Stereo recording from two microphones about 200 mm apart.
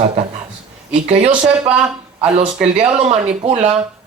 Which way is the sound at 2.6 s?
30° right (ahead or behind).